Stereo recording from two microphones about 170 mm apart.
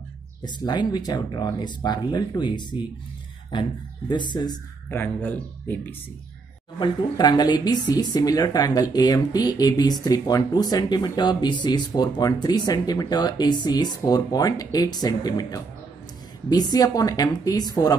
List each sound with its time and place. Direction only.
0.4 s speech: 25° left (ahead or behind)
4.1 s speech: 25° left (ahead or behind)
4.8 s speech: 10° left (ahead or behind)
6.8 s speech: 25° left (ahead or behind)